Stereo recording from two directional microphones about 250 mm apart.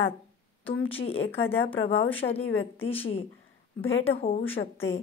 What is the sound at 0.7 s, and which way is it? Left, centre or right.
A woman's voice, left.